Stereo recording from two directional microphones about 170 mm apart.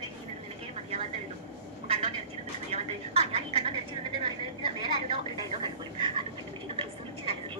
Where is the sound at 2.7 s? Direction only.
35° right (ahead or behind).